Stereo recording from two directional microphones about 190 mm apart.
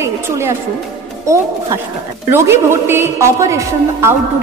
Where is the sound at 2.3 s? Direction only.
15° right (ahead or behind).